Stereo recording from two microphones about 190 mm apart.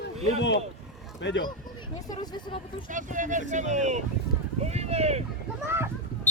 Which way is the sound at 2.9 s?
45° right (ahead or behind).